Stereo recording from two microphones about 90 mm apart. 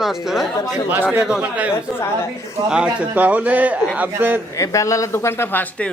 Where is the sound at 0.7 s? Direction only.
25° right (ahead or behind).